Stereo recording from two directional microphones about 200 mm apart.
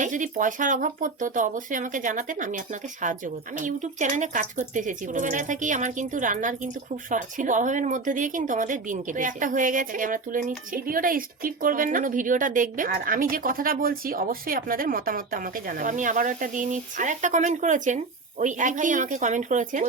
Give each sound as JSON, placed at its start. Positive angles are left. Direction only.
{"t": 0.0, "sound": "a woman's voice", "side_deg": -40}
{"t": 3.6, "sound": "a woman's voice", "side_deg": -40}